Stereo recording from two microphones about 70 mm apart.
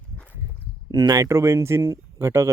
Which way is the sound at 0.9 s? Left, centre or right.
Right.